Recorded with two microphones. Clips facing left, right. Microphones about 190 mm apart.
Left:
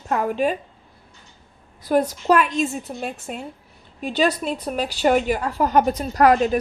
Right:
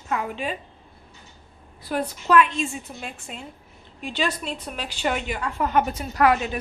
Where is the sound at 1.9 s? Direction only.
40° left (ahead or behind).